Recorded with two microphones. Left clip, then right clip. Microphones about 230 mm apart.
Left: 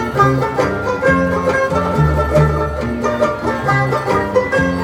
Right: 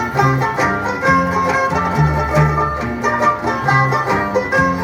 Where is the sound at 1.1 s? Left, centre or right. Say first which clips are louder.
Right 1 dB; centre.